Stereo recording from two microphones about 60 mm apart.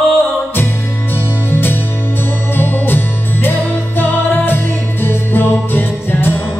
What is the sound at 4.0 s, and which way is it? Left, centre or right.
Music, left.